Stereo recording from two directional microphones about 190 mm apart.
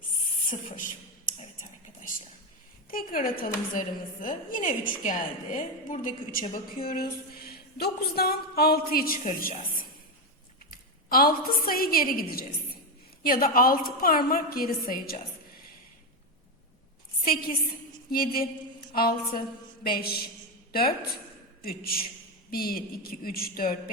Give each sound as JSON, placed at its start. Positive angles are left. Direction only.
{"t": 0.8, "sound": "a sound", "side_deg": 45}
{"t": 2.9, "sound": "a woman's voice", "side_deg": 50}
{"t": 18.1, "sound": "a woman's voice", "side_deg": 50}
{"t": 21.6, "sound": "a woman's voice", "side_deg": 50}